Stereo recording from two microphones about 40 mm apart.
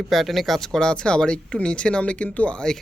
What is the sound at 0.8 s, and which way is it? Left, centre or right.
Speech, left.